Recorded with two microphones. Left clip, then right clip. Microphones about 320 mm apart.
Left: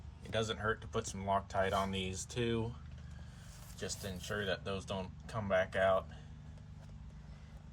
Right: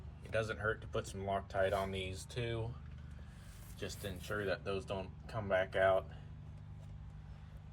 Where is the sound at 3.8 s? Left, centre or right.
Left.